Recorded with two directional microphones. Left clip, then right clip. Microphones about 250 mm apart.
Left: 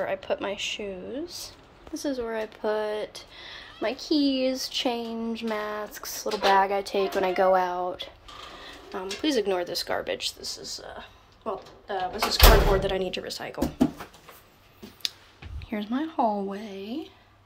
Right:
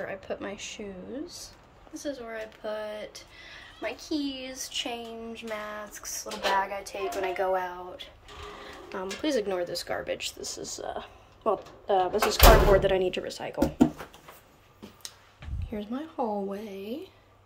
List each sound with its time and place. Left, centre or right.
0.0 s a woman's voice: centre
2.0 s speech: centre
8.9 s a woman's voice: centre
10.4 s speech: centre
15.7 s a woman's voice: centre